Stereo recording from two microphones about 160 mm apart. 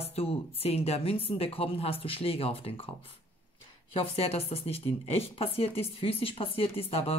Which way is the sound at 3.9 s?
40° left (ahead or behind).